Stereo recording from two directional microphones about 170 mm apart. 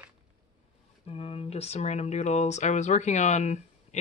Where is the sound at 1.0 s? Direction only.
35° left (ahead or behind).